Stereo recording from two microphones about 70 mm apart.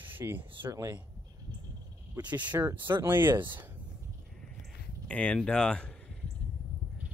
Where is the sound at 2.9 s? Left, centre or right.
Right.